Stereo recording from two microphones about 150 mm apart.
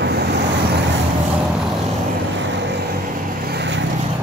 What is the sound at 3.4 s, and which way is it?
Vehicle, 90° right.